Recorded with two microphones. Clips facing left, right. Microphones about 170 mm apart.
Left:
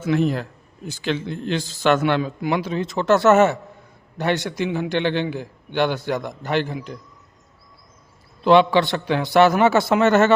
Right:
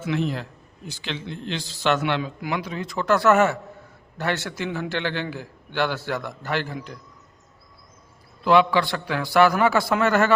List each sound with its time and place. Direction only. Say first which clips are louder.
0.0 s a man's voice: left 5 dB; 45° left (ahead or behind)
2.4 s a man's voice: left 6 dB; 30° left (ahead or behind)
8.4 s a man's voice: left 3 dB; 25° left (ahead or behind)